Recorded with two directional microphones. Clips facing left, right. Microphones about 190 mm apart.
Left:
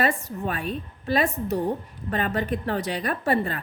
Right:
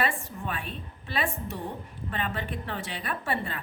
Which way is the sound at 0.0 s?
40° left (ahead or behind).